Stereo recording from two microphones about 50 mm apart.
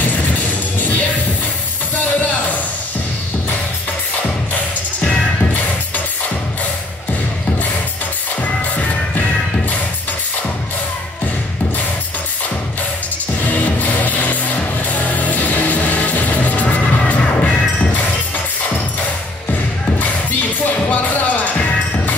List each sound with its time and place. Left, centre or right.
0.7 s music: left
2.0 s a sound: left
13.4 s music: left
20.0 s music: left